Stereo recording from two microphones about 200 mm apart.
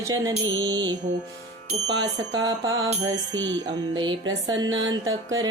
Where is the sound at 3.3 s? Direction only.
65° right (ahead or behind).